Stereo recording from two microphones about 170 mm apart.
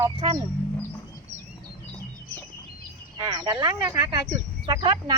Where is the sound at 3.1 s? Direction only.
25° right (ahead or behind).